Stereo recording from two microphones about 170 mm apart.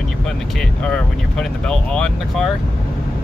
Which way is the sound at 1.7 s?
5° left (ahead or behind).